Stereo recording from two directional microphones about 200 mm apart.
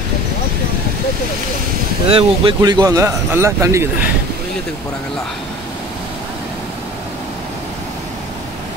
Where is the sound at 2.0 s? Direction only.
25° right (ahead or behind).